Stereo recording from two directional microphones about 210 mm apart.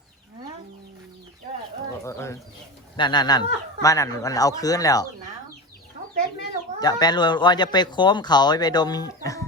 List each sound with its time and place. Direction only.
2.0 s speech: 15° left (ahead or behind)
6.7 s speech: 20° left (ahead or behind)